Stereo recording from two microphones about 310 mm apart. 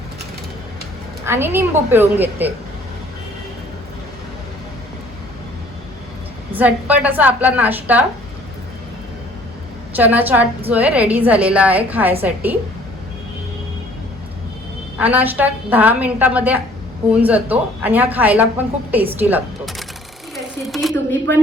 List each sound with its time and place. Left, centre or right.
1.2 s a woman's voice: centre
6.5 s speech: centre
9.9 s speech: centre
14.9 s speech: centre
20.3 s a sound: centre